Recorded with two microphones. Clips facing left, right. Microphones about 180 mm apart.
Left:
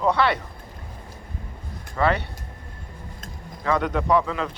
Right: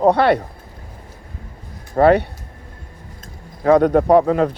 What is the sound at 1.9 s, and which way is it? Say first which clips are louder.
Speech: right 10 dB; 55° right (ahead or behind).